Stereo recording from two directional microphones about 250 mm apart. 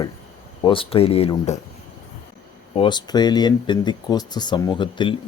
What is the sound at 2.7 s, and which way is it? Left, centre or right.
Speech, centre.